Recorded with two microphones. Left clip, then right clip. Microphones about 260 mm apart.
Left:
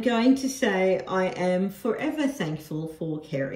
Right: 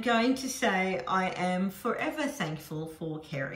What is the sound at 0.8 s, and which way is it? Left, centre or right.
Speech, centre.